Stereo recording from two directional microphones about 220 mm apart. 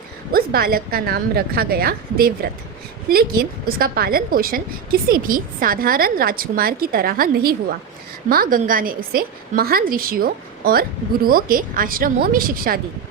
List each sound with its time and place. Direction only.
0.3 s a woman's voice: 45° right (ahead or behind)